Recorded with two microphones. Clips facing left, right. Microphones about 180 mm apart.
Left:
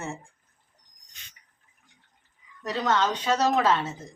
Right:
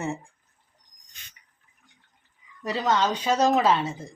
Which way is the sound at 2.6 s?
10° right (ahead or behind).